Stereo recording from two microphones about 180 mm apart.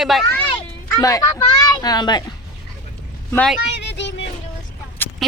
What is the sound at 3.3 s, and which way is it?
Speech, 5° left (ahead or behind).